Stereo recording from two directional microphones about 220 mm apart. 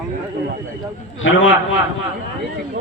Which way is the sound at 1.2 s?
65° left (ahead or behind).